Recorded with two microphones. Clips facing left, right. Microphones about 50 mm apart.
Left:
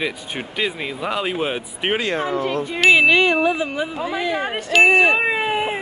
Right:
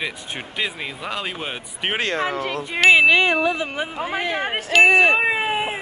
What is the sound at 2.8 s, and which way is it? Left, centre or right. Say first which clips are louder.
Speech: even; centre.